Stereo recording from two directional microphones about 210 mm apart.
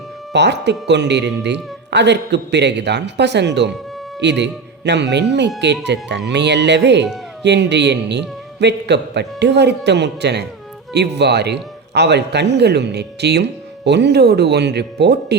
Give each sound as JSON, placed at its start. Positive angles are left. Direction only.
{"t": 0.3, "sound": "a man's voice", "side_deg": -55}